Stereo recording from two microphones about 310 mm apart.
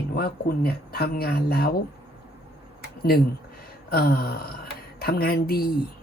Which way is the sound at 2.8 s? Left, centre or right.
Left.